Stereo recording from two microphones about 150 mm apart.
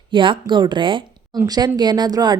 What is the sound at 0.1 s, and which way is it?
A woman's voice, 35° right (ahead or behind).